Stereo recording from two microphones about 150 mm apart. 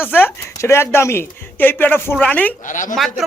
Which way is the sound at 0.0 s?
15° left (ahead or behind).